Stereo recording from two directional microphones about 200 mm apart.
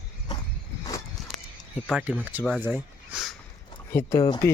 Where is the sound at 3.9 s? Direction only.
15° left (ahead or behind).